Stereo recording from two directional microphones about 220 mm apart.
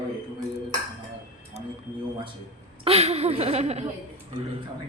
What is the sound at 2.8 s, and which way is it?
Speech, 25° right (ahead or behind).